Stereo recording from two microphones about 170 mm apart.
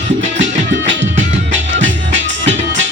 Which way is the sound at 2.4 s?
90° right.